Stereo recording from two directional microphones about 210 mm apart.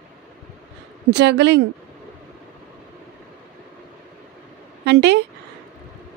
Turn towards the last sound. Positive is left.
turn(degrees=-55)  # may be behind; listen again after turning